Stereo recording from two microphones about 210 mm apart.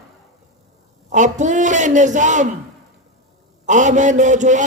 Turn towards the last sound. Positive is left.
turn(degrees=-35)  # may be behind; listen again after turning